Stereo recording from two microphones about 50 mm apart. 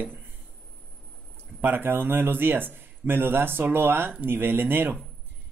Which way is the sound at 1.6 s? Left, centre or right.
Right.